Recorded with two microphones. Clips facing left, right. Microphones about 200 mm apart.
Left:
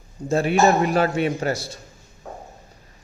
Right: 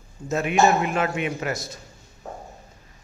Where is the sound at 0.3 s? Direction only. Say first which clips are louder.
Left 2 dB; 30° left (ahead or behind).